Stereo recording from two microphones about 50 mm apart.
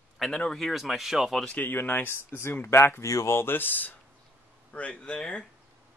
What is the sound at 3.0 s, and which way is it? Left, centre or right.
Speech, left.